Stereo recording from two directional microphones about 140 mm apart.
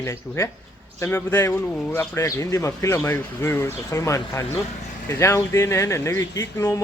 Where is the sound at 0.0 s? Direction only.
20° left (ahead or behind).